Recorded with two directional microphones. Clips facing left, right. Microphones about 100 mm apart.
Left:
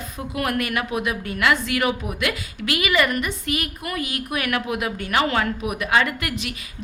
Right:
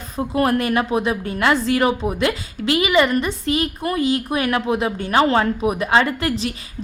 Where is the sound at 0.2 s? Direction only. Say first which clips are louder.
Right 6 dB; 30° right (ahead or behind).